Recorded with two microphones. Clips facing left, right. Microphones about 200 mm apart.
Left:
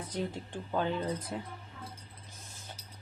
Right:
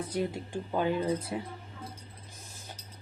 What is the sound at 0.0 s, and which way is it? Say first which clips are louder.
Speech: right 4 dB; 10° right (ahead or behind).